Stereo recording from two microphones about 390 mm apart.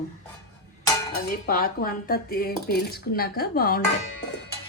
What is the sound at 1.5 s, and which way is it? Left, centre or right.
A woman's voice, left.